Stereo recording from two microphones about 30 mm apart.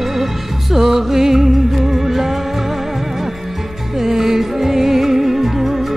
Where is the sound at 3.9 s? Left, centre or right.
Centre.